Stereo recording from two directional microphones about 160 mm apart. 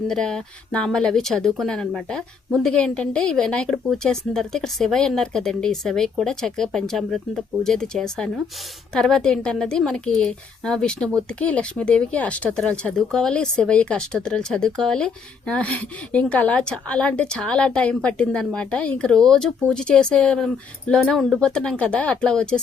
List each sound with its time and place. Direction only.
0.1 s speech: 5° left (ahead or behind)